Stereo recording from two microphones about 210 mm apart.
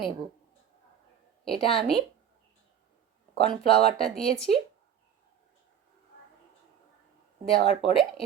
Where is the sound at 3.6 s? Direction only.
45° right (ahead or behind).